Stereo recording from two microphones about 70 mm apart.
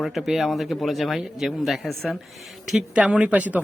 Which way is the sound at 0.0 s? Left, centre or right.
Centre.